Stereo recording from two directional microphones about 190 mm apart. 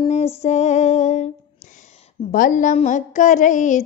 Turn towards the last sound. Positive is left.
turn(degrees=40)  # may be behind; listen again after turning